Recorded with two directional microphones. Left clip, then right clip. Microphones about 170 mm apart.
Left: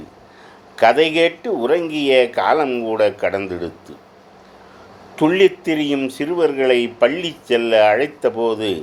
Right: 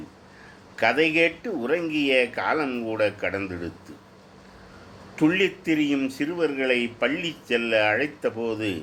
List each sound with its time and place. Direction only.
0.8 s speech: 25° left (ahead or behind)
5.1 s speech: 25° left (ahead or behind)